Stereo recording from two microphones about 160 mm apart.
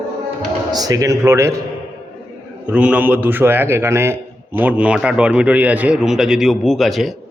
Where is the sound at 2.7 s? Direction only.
10° right (ahead or behind).